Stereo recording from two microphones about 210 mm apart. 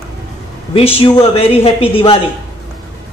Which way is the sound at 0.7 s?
25° left (ahead or behind).